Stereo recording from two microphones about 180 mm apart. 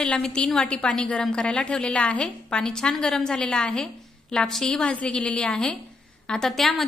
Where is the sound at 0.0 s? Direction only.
5° left (ahead or behind).